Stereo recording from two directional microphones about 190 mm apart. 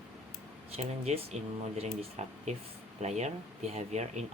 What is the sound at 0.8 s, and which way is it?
Speech, 35° right (ahead or behind).